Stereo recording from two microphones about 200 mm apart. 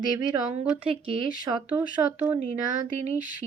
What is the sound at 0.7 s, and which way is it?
A woman's voice, 5° right (ahead or behind).